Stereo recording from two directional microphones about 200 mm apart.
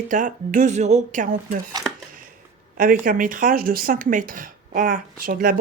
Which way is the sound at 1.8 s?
20° right (ahead or behind).